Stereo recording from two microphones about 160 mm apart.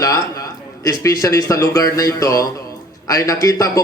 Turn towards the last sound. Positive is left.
turn(degrees=20)  # may be behind; listen again after turning